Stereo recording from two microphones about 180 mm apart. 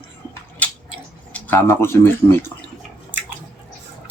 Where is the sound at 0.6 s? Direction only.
10° left (ahead or behind).